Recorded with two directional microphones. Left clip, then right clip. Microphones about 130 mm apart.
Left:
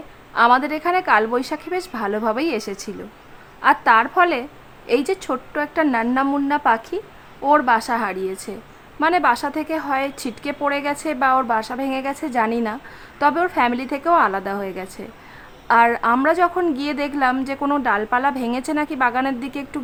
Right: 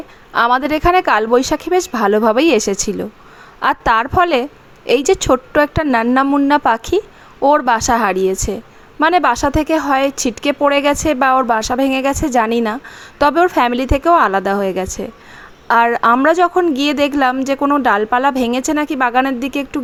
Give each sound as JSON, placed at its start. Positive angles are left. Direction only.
{"t": 0.3, "sound": "a woman's voice", "side_deg": -55}